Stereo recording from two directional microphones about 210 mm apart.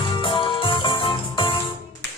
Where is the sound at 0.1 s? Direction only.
25° left (ahead or behind).